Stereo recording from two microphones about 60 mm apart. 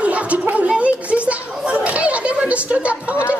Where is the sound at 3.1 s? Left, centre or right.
Left.